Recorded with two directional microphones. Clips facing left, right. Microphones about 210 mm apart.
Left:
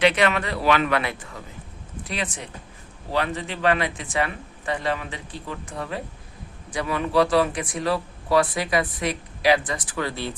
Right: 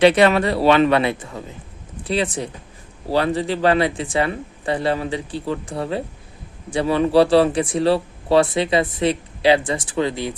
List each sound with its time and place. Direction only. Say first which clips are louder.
0.0 s speech: right 7 dB; 30° right (ahead or behind)